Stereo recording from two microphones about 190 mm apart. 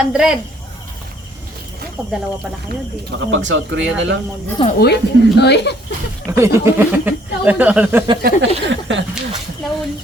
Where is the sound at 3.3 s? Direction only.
85° right.